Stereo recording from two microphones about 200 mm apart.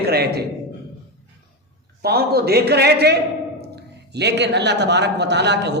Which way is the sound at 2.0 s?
50° right (ahead or behind).